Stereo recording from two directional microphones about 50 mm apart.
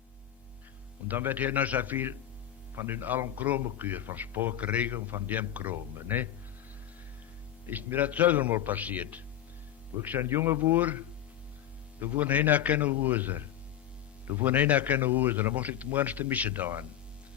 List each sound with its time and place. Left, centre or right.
1.0 s a man's voice: right
2.7 s a man's voice: right
7.7 s a man's voice: right
10.2 s a man's voice: right
11.9 s a man's voice: right
15.5 s a man's voice: right